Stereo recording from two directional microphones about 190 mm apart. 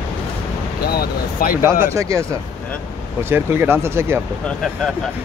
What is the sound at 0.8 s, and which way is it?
Speech, 50° left (ahead or behind).